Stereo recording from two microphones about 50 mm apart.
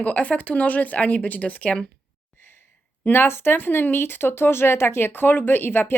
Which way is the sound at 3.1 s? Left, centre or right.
Left.